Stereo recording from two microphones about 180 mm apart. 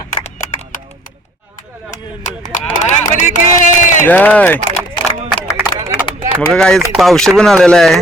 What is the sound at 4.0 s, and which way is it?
Speech, 10° left (ahead or behind).